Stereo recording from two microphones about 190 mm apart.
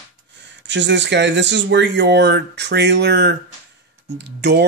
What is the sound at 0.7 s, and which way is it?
Speech, 70° right (ahead or behind).